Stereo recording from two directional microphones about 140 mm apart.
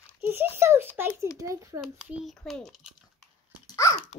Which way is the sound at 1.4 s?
25° right (ahead or behind).